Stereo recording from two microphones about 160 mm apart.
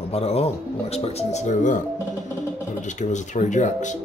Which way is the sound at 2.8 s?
50° left (ahead or behind).